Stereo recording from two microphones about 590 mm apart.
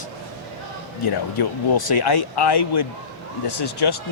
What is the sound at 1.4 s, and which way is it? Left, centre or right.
Speech, left.